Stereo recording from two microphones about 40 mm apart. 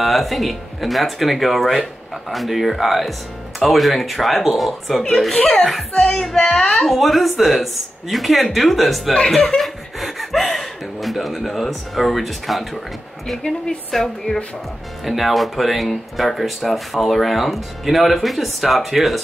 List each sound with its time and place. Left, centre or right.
0.0 s speech: centre
6.4 s a woman's voice: centre
6.7 s speech: centre
9.3 s chuckle: centre
14.0 s speech: centre
15.0 s speech: centre